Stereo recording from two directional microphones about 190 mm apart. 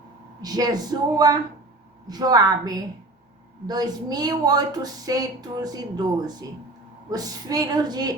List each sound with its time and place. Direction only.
0.4 s a woman's voice: 20° right (ahead or behind)
7.1 s a woman's voice: 20° right (ahead or behind)